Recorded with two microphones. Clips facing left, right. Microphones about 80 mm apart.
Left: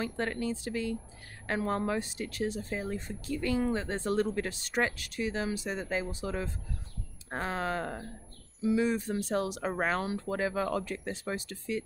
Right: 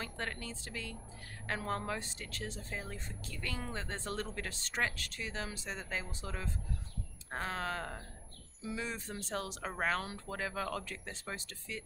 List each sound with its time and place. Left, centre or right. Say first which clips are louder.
0.0 s speech: left 9 dB; centre